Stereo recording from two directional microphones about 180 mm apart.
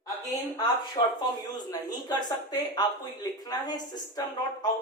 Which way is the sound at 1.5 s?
20° left (ahead or behind).